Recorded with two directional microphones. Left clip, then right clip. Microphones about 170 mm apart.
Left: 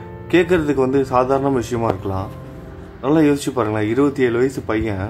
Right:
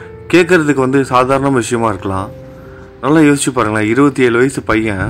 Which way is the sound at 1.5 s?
10° right (ahead or behind).